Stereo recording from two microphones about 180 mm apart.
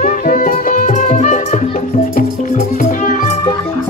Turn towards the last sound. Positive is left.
turn(degrees=50)  # may be behind; listen again after turning